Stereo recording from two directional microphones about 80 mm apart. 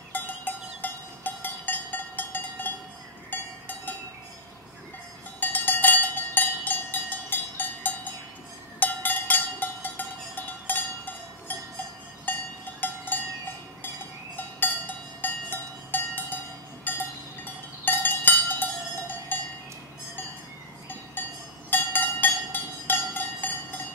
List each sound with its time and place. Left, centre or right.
0.1 s cowbell: left
5.4 s cowbell: left
14.3 s cowbell: left
21.2 s cowbell: left